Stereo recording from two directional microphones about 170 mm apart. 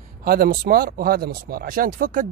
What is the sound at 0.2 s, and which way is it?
Speech, 65° right (ahead or behind).